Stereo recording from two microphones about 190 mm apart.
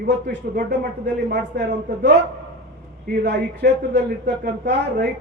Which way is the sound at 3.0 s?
60° right (ahead or behind).